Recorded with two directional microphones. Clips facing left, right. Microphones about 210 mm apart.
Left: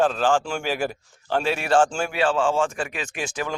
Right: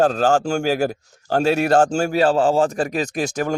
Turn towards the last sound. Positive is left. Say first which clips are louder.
# right 7 dB
turn(degrees=-40)  # may be behind; listen again after turning